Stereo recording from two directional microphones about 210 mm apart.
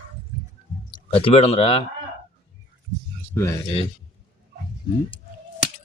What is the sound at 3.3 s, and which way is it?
Speech, 15° left (ahead or behind).